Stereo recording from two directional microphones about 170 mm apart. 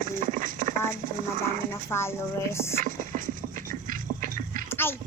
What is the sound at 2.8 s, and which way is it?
Music, 45° right (ahead or behind).